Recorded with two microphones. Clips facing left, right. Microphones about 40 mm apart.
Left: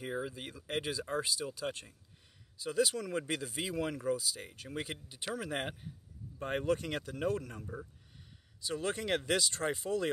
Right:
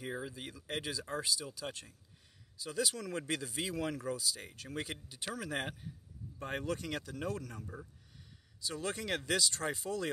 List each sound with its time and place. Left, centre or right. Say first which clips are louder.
0.0 s speech: left 3 dB; centre; by 7.6 s left
7.6 s speech: left 3 dB; centre
8.5 s speech: left 3 dB; left